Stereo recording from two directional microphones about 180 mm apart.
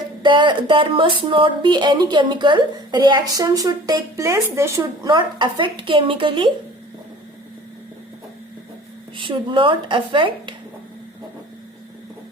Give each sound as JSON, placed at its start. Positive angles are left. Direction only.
{"t": 0.2, "sound": "speech", "side_deg": -25}
{"t": 9.1, "sound": "speech", "side_deg": -30}